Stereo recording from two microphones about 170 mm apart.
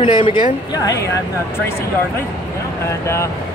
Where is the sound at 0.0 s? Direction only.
30° left (ahead or behind).